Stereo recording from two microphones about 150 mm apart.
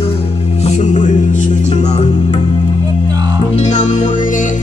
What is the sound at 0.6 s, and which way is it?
Music, 50° left (ahead or behind).